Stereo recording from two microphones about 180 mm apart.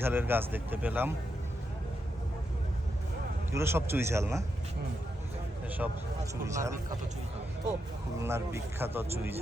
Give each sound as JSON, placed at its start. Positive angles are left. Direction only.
{"t": 0.0, "sound": "speech", "side_deg": -10}
{"t": 3.5, "sound": "speech", "side_deg": -15}
{"t": 5.6, "sound": "speech", "side_deg": -10}
{"t": 8.2, "sound": "speech", "side_deg": -15}